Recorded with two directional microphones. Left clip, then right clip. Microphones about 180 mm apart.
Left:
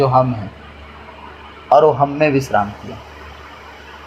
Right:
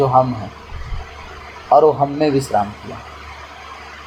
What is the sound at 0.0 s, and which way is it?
Speech, 20° left (ahead or behind).